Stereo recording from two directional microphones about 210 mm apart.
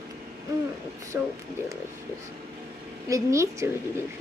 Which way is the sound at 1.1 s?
10° right (ahead or behind).